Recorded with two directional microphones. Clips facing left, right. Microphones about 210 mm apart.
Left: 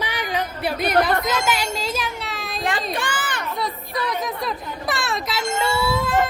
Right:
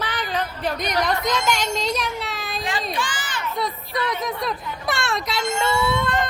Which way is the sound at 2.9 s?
55° left (ahead or behind).